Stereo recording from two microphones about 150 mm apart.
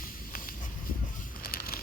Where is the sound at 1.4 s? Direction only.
80° left.